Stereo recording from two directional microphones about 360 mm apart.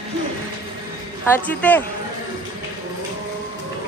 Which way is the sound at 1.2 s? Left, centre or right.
Centre.